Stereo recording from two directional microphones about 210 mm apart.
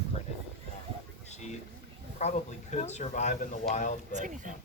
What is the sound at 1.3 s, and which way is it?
Speech, 35° left (ahead or behind).